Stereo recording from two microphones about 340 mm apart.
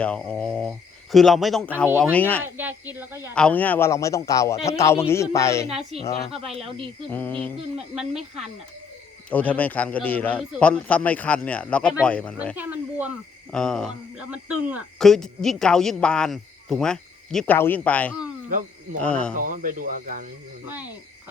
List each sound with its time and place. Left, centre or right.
0.0 s a man's voice: centre
2.1 s a man's voice: centre
2.4 s a woman's voice: centre
3.3 s a man's voice: centre
6.0 s speech: centre
6.6 s a woman's voice: centre
7.1 s a man's voice: centre
9.3 s a man's voice: centre
19.4 s speech: right